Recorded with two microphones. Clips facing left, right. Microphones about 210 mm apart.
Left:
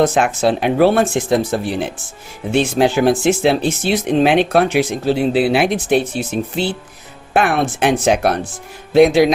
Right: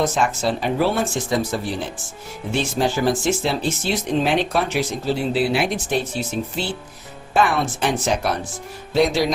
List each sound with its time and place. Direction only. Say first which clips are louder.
0.2 s speech: left 6 dB; 65° left (ahead or behind)
1.5 s speech: left 5 dB; 55° left (ahead or behind)
7.3 s speech: left 4 dB; 60° left (ahead or behind)